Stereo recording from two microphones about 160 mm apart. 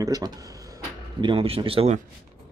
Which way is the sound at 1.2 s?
35° right (ahead or behind).